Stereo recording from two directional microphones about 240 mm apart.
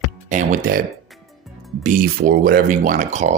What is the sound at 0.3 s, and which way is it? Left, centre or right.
Speech, right.